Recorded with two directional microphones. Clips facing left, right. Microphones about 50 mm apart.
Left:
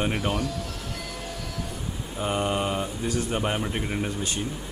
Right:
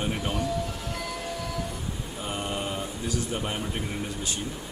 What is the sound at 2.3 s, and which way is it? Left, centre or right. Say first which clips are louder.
Mantra: left 6 dB; left.